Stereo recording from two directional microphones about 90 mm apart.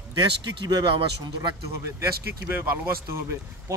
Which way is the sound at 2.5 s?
25° right (ahead or behind).